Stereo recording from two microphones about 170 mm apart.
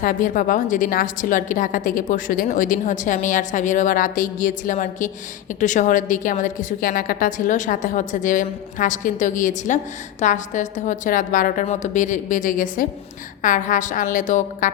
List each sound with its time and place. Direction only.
0.0 s a woman's voice: 55° left (ahead or behind)